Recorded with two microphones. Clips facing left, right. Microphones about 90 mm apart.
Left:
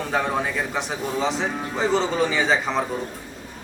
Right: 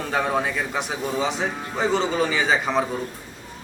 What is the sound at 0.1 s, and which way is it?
Speech, centre (ahead or behind).